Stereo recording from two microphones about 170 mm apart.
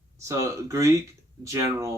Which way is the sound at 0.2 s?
15° right (ahead or behind).